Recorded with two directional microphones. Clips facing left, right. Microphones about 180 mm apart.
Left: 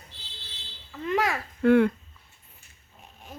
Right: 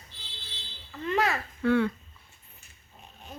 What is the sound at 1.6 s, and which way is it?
Speech, 55° left (ahead or behind).